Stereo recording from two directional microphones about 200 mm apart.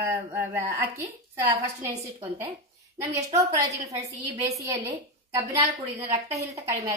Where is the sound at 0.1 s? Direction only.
15° right (ahead or behind).